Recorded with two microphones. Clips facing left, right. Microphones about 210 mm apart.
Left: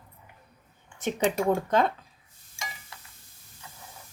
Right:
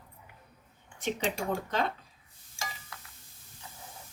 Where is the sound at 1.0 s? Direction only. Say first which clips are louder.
Left 6 dB; 50° left (ahead or behind).